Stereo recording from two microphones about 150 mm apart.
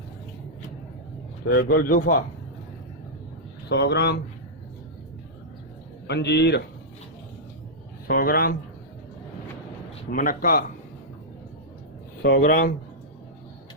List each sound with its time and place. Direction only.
1.5 s speech: 80° left
3.7 s a man's voice: 90° left
6.3 s a man's voice: 90° left
8.0 s speech: 85° left
10.1 s speech: 70° left (ahead or behind)
12.2 s speech: 75° left (ahead or behind)